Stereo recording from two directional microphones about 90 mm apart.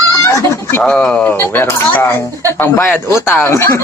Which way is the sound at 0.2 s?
30° left (ahead or behind).